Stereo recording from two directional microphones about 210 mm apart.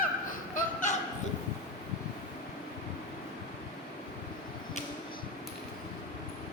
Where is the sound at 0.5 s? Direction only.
40° left (ahead or behind).